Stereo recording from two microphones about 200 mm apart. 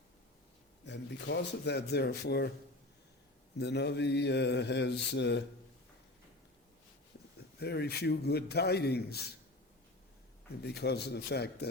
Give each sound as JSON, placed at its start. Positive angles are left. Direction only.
{"t": 0.9, "sound": "mantra", "side_deg": 60}
{"t": 3.6, "sound": "mantra", "side_deg": 55}
{"t": 7.6, "sound": "a man's voice", "side_deg": 55}
{"t": 10.6, "sound": "mantra", "side_deg": 55}